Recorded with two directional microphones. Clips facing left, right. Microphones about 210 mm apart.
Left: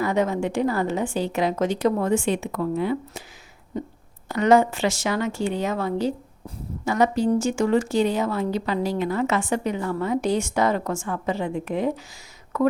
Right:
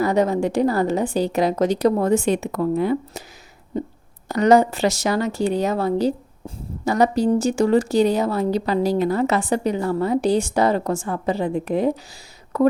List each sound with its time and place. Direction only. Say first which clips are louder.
0.0 s speech: right 4 dB; 35° right (ahead or behind)
4.3 s speech: right 3 dB; 40° right (ahead or behind)